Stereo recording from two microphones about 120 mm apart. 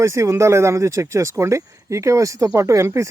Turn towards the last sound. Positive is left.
turn(degrees=-25)  # may be behind; listen again after turning